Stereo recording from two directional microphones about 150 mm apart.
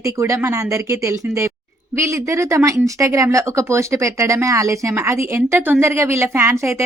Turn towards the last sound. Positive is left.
turn(degrees=-20)  # may be behind; listen again after turning